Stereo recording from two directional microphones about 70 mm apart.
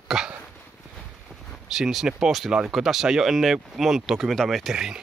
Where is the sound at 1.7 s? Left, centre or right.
Centre.